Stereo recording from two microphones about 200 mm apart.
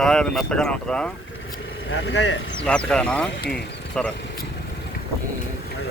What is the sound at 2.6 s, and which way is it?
Speech, 5° left (ahead or behind).